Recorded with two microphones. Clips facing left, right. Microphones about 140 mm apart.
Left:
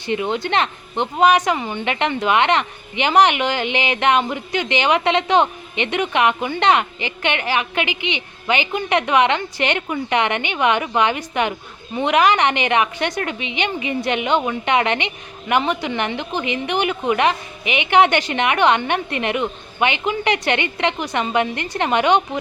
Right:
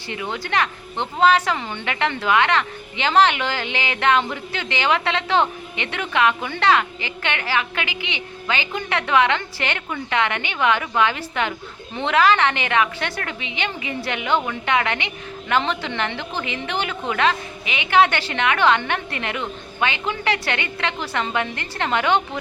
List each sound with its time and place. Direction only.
0.1 s a woman's voice: 20° left (ahead or behind)